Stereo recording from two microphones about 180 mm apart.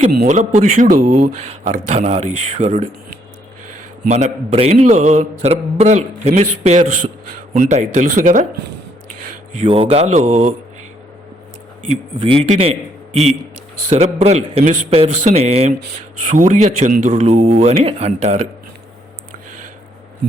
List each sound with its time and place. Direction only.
0.3 s speech: 40° right (ahead or behind)
4.4 s speech: 35° right (ahead or behind)
9.6 s speech: 30° right (ahead or behind)
12.2 s speech: 30° right (ahead or behind)
13.9 s speech: 35° right (ahead or behind)
17.4 s speech: 35° right (ahead or behind)